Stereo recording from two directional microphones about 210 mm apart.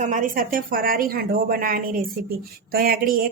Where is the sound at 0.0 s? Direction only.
35° right (ahead or behind).